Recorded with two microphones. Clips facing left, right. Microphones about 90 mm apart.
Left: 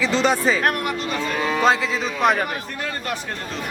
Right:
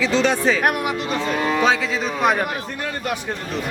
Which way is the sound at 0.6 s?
15° right (ahead or behind).